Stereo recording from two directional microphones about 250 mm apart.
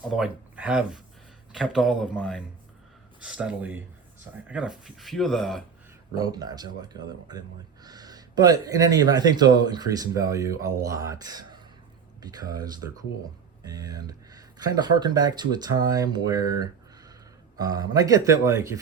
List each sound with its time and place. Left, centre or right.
0.1 s speech: centre
6.1 s speech: centre